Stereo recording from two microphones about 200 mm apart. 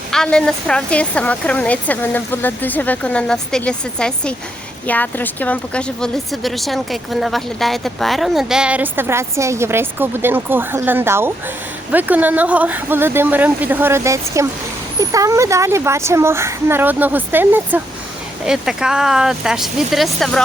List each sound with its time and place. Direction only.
0.1 s a woman's voice: 5° left (ahead or behind)